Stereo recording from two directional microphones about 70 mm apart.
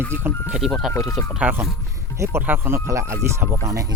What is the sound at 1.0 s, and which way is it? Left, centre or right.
Speech, left.